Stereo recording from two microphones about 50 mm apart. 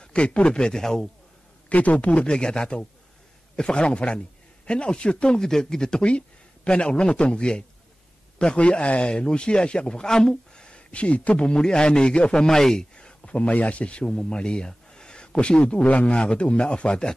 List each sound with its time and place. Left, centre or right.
0.0 s a man's voice: centre
1.7 s a man's voice: left; by 12.8 s centre
12.9 s speech: left